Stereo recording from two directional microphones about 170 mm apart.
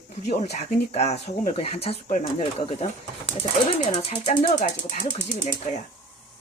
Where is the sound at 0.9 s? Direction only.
40° left (ahead or behind).